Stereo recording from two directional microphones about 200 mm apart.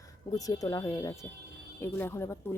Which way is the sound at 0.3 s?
15° left (ahead or behind).